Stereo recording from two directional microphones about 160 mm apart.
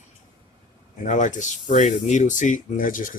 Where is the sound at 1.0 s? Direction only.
50° left (ahead or behind).